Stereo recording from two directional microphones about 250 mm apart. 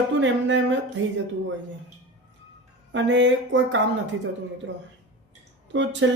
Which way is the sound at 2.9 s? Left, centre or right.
Right.